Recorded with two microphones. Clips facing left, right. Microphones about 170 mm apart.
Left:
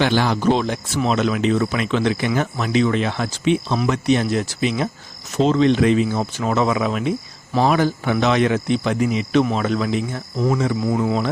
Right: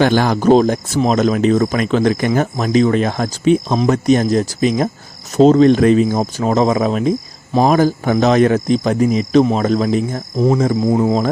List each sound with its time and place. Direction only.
0.0 s speech: 45° right (ahead or behind)